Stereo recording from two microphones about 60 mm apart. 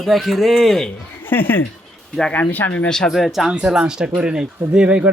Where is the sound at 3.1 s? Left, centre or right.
Centre.